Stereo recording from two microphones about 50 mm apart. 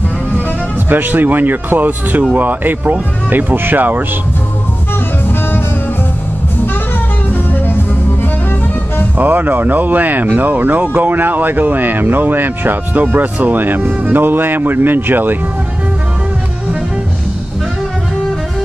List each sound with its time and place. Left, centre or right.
0.8 s speech: right
9.2 s speech: right